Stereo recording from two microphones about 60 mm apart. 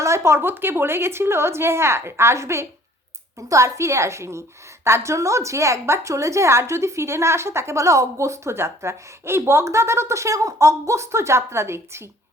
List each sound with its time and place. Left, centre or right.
0.0 s a woman's voice: right